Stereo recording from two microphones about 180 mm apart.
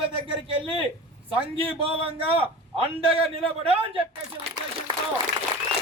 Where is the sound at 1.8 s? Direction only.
30° right (ahead or behind).